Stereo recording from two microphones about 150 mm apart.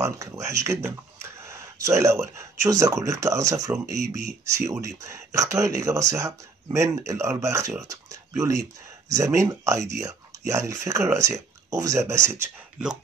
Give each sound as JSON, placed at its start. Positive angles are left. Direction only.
{"t": 0.0, "sound": "speech", "side_deg": -20}